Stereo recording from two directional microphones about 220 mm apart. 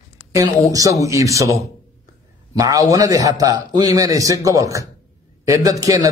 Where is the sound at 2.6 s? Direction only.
15° right (ahead or behind).